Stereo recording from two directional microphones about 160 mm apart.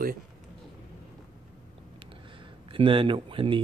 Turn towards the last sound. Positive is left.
turn(degrees=-30)  # may be behind; listen again after turning